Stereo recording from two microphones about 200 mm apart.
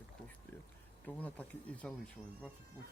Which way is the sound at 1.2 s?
10° left (ahead or behind).